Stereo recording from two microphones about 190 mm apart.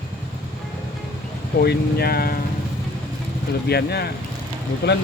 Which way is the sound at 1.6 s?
55° left (ahead or behind).